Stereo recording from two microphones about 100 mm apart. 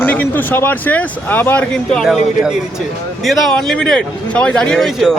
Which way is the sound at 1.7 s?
5° left (ahead or behind).